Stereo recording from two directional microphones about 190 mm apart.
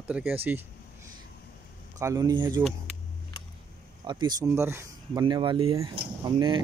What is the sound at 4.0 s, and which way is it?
Speech, 25° right (ahead or behind).